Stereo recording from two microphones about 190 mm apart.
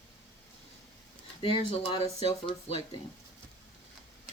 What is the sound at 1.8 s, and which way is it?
Speech, 30° left (ahead or behind).